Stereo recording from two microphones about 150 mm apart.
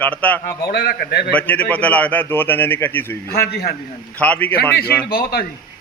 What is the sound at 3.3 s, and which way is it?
Speech, 90° left.